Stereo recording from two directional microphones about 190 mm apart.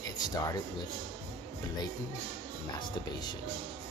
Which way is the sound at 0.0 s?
20° left (ahead or behind).